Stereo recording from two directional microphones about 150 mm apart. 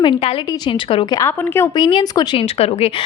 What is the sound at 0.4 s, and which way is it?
Speech, 25° left (ahead or behind).